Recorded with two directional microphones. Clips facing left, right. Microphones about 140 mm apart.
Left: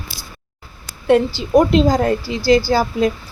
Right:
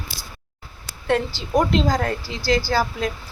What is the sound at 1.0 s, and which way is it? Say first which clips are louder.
A woman's voice: left 8 dB; 10° left (ahead or behind).